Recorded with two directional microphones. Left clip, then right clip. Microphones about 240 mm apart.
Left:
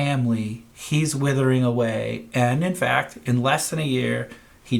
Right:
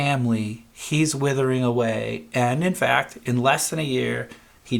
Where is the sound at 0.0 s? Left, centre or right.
Right.